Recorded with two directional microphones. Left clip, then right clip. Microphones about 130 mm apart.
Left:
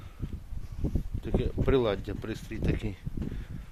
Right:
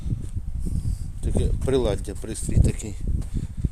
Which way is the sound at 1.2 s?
50° right (ahead or behind).